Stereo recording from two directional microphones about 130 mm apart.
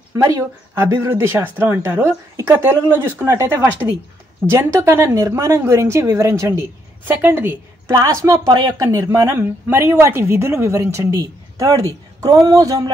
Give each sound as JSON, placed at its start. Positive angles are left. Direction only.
{"t": 0.1, "sound": "speech", "side_deg": -25}
{"t": 8.0, "sound": "speech", "side_deg": -30}